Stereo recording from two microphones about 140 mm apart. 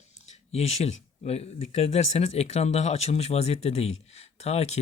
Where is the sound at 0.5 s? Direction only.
50° left (ahead or behind).